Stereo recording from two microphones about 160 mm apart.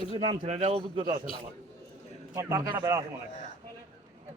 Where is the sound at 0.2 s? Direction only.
40° right (ahead or behind).